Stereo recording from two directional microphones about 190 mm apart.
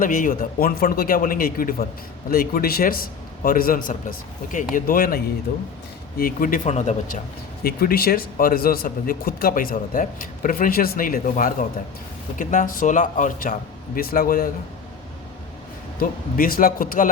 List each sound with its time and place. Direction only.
0.0 s speech: 45° left (ahead or behind)
7.6 s speech: 50° left (ahead or behind)
16.0 s speech: 50° left (ahead or behind)